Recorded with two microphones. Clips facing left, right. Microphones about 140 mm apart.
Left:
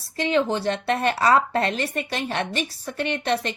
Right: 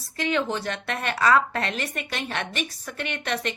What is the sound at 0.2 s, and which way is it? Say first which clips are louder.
A woman's voice: left 4 dB; 30° left (ahead or behind).